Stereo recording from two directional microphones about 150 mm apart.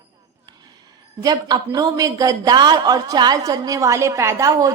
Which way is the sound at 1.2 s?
25° right (ahead or behind).